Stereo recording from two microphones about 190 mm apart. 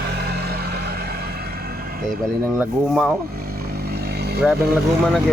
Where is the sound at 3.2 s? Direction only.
55° right (ahead or behind).